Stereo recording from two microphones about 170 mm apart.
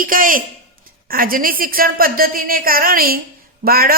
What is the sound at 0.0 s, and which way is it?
Speech, 55° right (ahead or behind).